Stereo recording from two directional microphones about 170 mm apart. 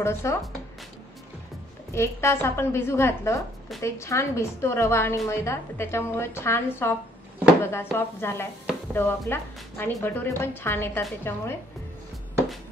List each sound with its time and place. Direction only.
0.0 s a woman's voice: 15° left (ahead or behind)
2.0 s a woman's voice: 15° left (ahead or behind)